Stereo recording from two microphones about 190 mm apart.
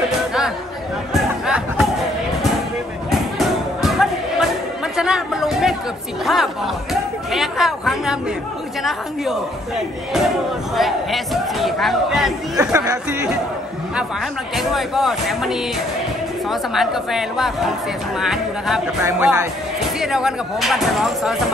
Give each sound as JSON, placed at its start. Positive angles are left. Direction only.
{"t": 1.1, "sound": "chatter", "side_deg": -5}
{"t": 3.1, "sound": "music", "side_deg": 0}
{"t": 4.9, "sound": "chatter", "side_deg": -5}
{"t": 6.2, "sound": "speech", "side_deg": 0}
{"t": 12.5, "sound": "speech", "side_deg": -15}
{"t": 14.6, "sound": "speech", "side_deg": 0}